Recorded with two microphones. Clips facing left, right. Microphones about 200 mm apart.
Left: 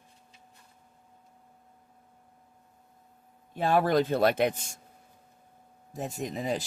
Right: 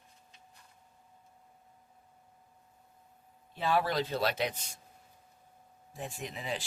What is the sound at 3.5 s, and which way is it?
Speech, 50° left (ahead or behind).